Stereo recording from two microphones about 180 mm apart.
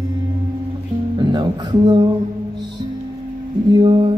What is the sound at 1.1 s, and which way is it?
Music, 20° right (ahead or behind).